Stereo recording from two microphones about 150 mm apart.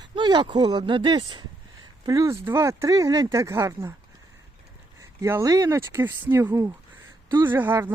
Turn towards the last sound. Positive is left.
turn(degrees=-15)  # may be behind; listen again after turning